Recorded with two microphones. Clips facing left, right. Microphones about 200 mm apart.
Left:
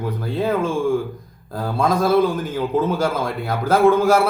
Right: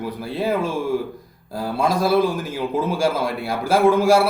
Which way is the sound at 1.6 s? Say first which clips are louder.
Left 1 dB; 10° right (ahead or behind).